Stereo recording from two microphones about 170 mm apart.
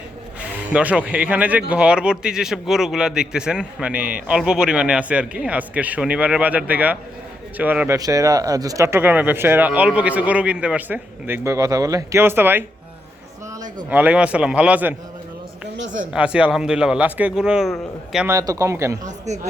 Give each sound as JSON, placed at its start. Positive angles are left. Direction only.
{"t": 0.3, "sound": "speech", "side_deg": -5}
{"t": 7.9, "sound": "speech", "side_deg": -20}
{"t": 13.9, "sound": "speech", "side_deg": -10}
{"t": 16.1, "sound": "speech", "side_deg": -5}
{"t": 18.3, "sound": "speech", "side_deg": -20}
{"t": 19.0, "sound": "speech", "side_deg": -45}